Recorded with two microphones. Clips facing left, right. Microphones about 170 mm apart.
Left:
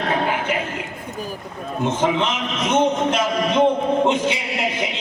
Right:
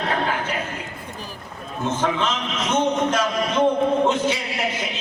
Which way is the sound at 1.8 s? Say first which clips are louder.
Left 3 dB; 15° left (ahead or behind).